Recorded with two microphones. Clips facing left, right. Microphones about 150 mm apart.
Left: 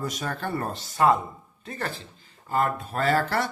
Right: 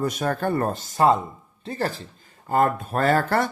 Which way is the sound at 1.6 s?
30° right (ahead or behind).